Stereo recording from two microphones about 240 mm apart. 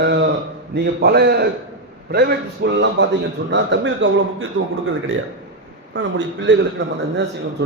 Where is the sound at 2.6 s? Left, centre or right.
Right.